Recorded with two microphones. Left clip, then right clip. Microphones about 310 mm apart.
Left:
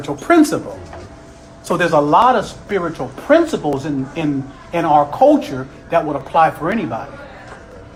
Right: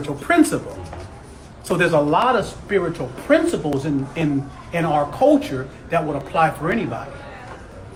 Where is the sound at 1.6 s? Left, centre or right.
Centre.